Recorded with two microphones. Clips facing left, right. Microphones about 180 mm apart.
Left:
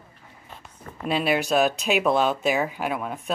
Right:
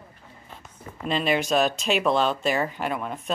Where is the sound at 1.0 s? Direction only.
5° left (ahead or behind).